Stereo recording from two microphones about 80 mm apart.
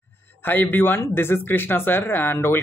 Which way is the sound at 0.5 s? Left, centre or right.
Left.